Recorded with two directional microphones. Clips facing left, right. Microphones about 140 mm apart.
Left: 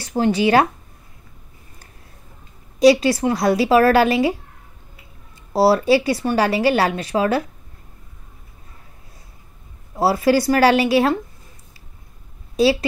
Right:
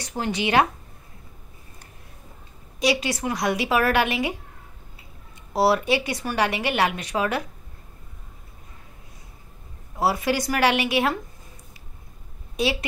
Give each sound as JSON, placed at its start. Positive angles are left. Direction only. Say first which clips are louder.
{"t": 0.0, "sound": "speech", "louder": "left 9 dB", "side_deg": 30}
{"t": 2.8, "sound": "speech", "louder": "left 10 dB", "side_deg": 35}
{"t": 5.5, "sound": "speech", "louder": "left 6 dB", "side_deg": 30}
{"t": 9.9, "sound": "speech", "louder": "left 7 dB", "side_deg": 35}